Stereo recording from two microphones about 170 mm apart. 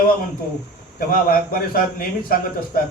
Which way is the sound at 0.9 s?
60° left (ahead or behind).